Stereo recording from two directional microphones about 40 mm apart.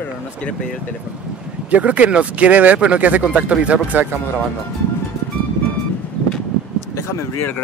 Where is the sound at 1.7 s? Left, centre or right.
Right.